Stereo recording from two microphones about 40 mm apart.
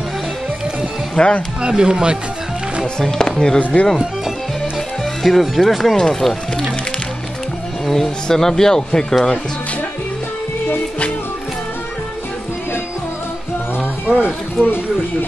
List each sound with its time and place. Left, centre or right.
1.2 s speech: centre
1.6 s speech: right
3.0 s speech: centre
5.2 s speech: centre
5.9 s speech: centre
7.8 s speech: centre
14.0 s a sound: right